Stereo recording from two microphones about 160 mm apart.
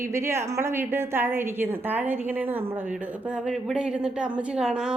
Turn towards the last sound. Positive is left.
turn(degrees=-5)  # may be behind; listen again after turning